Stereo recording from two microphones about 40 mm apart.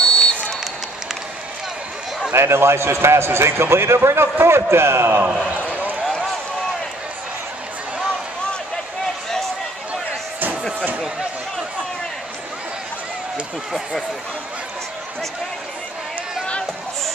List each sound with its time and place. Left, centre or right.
0.0 s run: left
2.3 s a man's voice: right
5.5 s a sound: right